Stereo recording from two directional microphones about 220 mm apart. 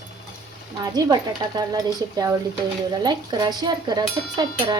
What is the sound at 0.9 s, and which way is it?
Speech, 15° right (ahead or behind).